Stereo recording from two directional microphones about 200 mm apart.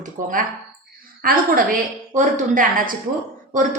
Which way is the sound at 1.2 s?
45° right (ahead or behind).